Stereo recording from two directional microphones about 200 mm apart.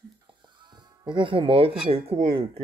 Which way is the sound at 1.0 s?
25° right (ahead or behind).